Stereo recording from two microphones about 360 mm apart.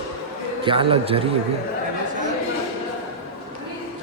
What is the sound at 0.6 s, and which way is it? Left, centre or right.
Speech, centre.